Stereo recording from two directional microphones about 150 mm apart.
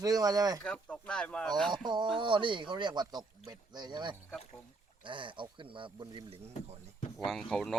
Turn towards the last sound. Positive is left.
turn(degrees=5)  # may be behind; listen again after turning